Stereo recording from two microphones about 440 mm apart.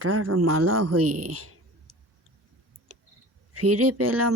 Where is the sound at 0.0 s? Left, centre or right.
Right.